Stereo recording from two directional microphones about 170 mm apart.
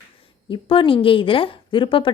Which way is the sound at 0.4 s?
30° left (ahead or behind).